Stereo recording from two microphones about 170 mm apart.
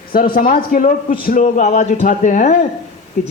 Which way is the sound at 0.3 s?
55° left (ahead or behind).